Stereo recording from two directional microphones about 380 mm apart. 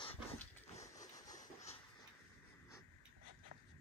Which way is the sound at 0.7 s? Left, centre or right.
Centre.